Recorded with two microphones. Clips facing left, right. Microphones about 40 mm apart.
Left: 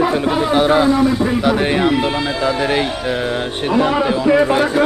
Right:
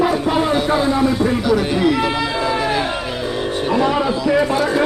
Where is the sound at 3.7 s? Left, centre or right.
Centre.